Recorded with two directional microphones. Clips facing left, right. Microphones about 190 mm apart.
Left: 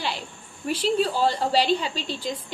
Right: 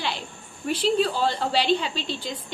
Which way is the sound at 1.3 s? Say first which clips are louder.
Left 1 dB; 35° left (ahead or behind).